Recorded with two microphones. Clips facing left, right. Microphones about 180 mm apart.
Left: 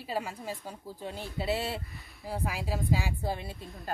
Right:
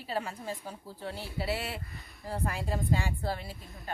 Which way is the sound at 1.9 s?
Centre (ahead or behind).